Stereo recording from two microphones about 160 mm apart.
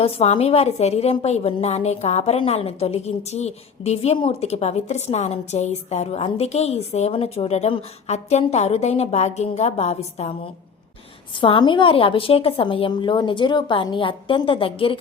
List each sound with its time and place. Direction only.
0.0 s a woman's voice: 40° left (ahead or behind)
11.3 s a woman's voice: 30° left (ahead or behind)